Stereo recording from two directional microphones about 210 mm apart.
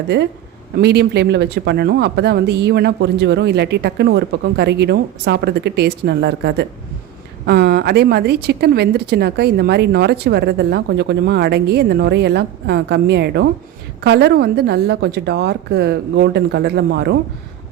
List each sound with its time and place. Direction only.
0.8 s a woman's voice: 50° right (ahead or behind)